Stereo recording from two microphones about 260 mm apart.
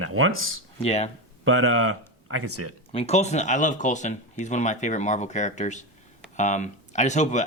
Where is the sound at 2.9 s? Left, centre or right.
Left.